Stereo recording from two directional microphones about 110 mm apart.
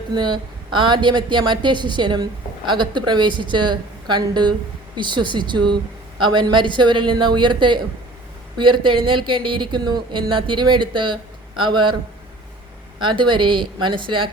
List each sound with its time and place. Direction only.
0.1 s speech: 45° right (ahead or behind)
13.0 s speech: 45° right (ahead or behind)